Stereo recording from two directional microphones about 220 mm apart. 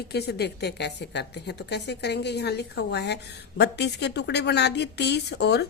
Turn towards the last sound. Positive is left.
turn(degrees=50)  # may be behind; listen again after turning